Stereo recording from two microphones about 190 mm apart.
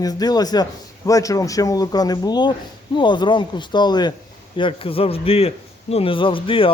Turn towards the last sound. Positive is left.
turn(degrees=25)  # may be behind; listen again after turning